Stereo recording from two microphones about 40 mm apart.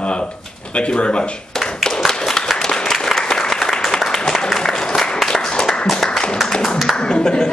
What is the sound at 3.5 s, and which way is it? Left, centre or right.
Applause, centre.